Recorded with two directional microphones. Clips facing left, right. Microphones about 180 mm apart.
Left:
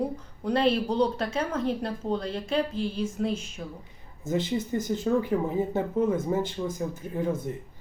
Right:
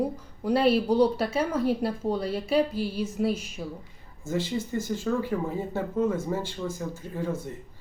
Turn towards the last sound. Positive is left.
turn(degrees=20)  # may be behind; listen again after turning